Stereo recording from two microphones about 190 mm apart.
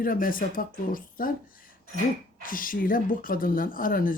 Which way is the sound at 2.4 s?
45° left (ahead or behind).